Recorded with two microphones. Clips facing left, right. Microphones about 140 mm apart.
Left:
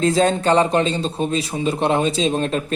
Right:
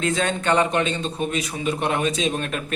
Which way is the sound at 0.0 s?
35° left (ahead or behind).